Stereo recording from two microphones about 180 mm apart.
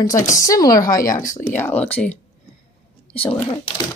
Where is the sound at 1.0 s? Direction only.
45° left (ahead or behind).